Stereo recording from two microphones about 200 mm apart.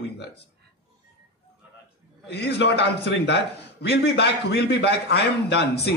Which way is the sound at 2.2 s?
55° left (ahead or behind).